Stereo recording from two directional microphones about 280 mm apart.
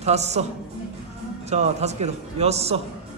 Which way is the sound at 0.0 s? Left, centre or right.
Right.